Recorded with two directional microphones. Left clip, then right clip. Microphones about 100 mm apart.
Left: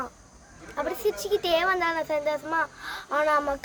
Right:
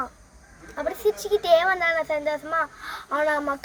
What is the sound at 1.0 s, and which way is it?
Speech, 45° left (ahead or behind).